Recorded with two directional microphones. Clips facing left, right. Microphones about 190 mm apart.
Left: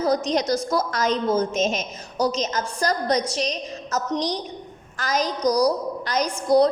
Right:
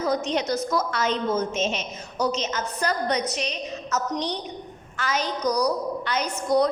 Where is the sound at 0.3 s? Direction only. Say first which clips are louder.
Left 3 dB; 35° left (ahead or behind).